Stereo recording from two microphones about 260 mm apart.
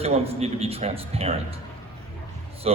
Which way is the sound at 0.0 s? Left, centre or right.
Right.